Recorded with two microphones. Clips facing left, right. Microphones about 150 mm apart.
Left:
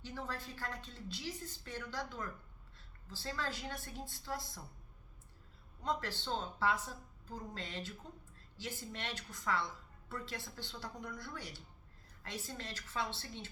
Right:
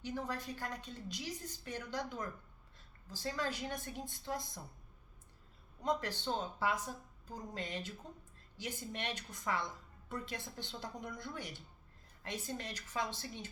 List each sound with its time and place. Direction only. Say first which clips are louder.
0.0 s a woman's voice: right 4 dB; 15° right (ahead or behind)
5.8 s a woman's voice: right 3 dB; 15° right (ahead or behind)